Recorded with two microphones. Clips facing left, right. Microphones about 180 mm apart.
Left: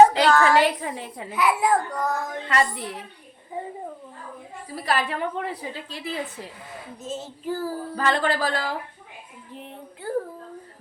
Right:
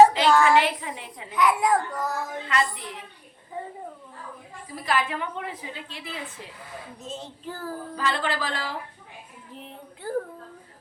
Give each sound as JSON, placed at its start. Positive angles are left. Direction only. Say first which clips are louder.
{"t": 0.0, "sound": "a sound", "louder": "left 1 dB", "side_deg": -5}
{"t": 0.6, "sound": "a woman's voice", "louder": "left 5 dB", "side_deg": 40}
{"t": 1.3, "sound": "speech", "louder": "even", "side_deg": 5}
{"t": 2.5, "sound": "a woman's voice", "louder": "left 4 dB", "side_deg": 40}
{"t": 4.9, "sound": "a woman's voice", "louder": "left 2 dB", "side_deg": 35}
{"t": 7.0, "sound": "child singing", "louder": "left 6 dB", "side_deg": 5}
{"t": 7.9, "sound": "speech", "louder": "left 4 dB", "side_deg": 45}
{"t": 10.0, "sound": "speech", "louder": "left 2 dB", "side_deg": 0}